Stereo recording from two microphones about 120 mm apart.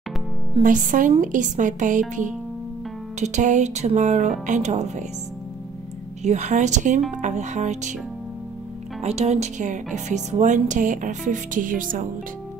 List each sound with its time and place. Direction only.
0.6 s speech: 90° right; by 5.0 s 75° right (ahead or behind)
6.2 s speech: 80° right
9.0 s speech: 65° right (ahead or behind); by 12.1 s 90° right